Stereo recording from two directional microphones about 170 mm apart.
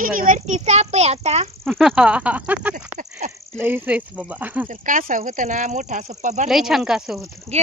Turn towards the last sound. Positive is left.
turn(degrees=0)  # may be behind; listen again after turning